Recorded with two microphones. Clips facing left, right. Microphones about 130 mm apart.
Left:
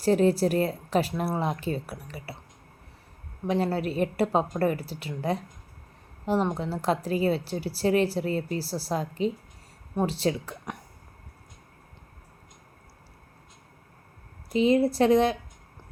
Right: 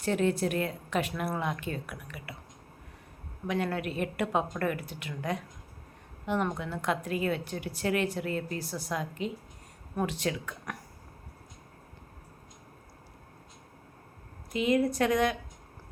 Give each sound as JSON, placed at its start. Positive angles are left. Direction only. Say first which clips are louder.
{"t": 0.0, "sound": "a woman's voice", "louder": "left 6 dB", "side_deg": 35}
{"t": 3.4, "sound": "a woman's voice", "louder": "left 5 dB", "side_deg": 30}
{"t": 14.5, "sound": "a woman's voice", "louder": "left 5 dB", "side_deg": 30}